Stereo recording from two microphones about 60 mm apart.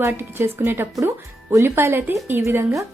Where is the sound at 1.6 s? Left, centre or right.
Right.